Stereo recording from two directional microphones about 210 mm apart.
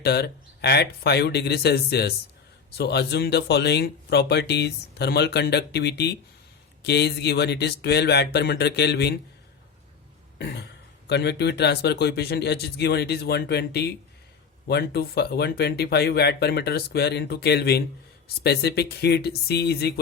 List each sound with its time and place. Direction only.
0.0 s speech: 50° left (ahead or behind)
10.3 s throat clearing: 55° left (ahead or behind)
11.1 s speech: 55° left (ahead or behind)